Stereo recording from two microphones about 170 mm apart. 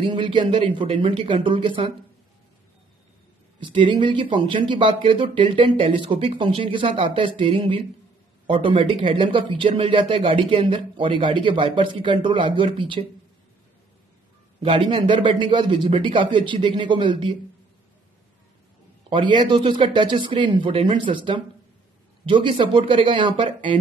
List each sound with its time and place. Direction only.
0.0 s speech: 30° right (ahead or behind)
3.5 s speech: 30° right (ahead or behind)
14.6 s speech: 30° right (ahead or behind)
19.0 s speech: 30° right (ahead or behind)